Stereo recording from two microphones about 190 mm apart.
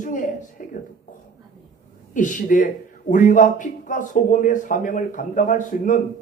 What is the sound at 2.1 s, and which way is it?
A man's voice, 45° left (ahead or behind).